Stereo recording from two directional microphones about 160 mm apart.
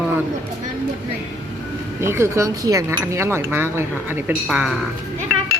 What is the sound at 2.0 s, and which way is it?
Speech, 15° right (ahead or behind).